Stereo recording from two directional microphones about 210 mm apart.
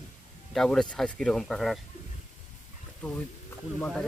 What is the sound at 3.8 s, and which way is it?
Speech, 5° left (ahead or behind).